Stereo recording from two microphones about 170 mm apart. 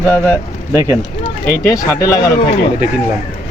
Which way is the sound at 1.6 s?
20° left (ahead or behind).